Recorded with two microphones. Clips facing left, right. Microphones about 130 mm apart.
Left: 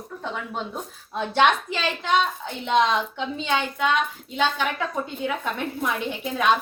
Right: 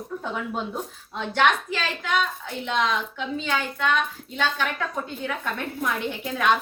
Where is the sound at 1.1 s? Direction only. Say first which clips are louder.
Left 2 dB; 20° left (ahead or behind).